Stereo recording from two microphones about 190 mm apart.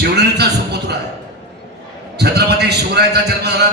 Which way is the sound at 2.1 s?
60° right (ahead or behind).